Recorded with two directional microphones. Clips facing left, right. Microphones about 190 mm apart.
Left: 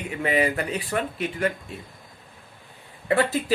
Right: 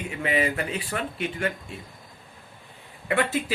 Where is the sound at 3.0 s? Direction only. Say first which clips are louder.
Left 3 dB; 35° left (ahead or behind).